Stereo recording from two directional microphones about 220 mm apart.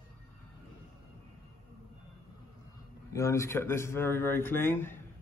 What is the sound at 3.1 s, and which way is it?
A man's voice, 15° left (ahead or behind).